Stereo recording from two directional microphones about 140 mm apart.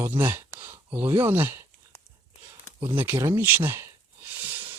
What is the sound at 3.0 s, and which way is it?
Speech, 20° right (ahead or behind).